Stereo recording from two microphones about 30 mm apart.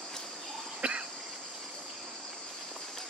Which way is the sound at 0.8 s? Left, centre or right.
Right.